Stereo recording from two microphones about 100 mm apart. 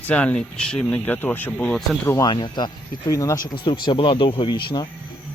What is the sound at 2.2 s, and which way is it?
Speech, 50° left (ahead or behind).